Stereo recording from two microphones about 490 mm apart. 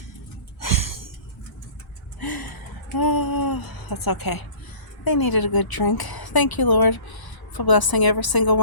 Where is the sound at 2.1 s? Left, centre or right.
Left.